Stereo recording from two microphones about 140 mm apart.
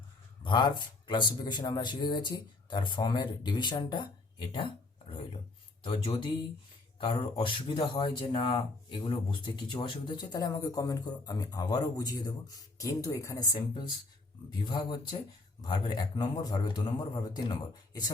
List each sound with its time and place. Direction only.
0.4 s speech: 30° left (ahead or behind)
5.8 s speech: 35° left (ahead or behind)